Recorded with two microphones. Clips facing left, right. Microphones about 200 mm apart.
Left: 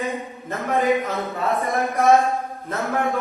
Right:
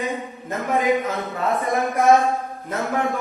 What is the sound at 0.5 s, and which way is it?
A man's voice, centre (ahead or behind).